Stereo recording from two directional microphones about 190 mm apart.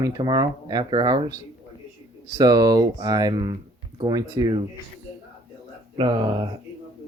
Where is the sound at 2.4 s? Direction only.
20° right (ahead or behind).